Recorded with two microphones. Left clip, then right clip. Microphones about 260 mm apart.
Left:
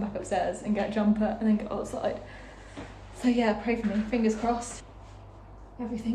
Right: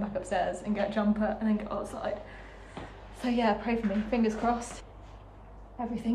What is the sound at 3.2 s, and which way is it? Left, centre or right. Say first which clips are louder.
A woman's voice: left 2 dB; centre.